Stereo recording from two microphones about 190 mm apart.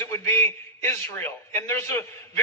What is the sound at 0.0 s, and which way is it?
A man's voice, 15° left (ahead or behind).